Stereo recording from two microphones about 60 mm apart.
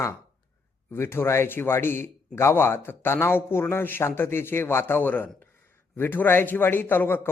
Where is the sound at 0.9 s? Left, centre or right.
Left.